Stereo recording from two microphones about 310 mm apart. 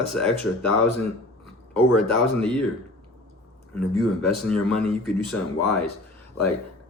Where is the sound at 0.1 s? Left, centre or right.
Centre.